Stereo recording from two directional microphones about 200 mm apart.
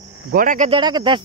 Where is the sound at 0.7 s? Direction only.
20° right (ahead or behind).